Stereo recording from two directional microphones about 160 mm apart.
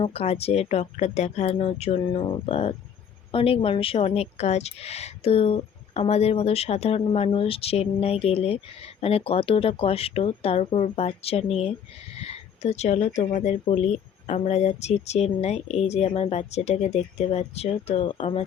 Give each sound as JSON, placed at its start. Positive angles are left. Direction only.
{"t": 0.0, "sound": "speech", "side_deg": 40}